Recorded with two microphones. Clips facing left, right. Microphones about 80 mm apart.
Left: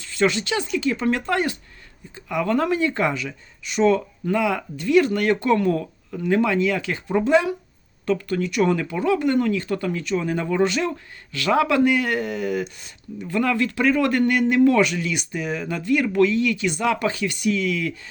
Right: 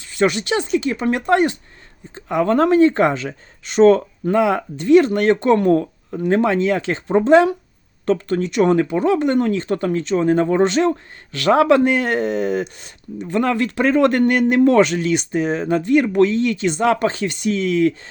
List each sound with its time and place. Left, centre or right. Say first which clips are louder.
0.2 s speech: right 3 dB; right
5.7 s speech: right 8 dB; right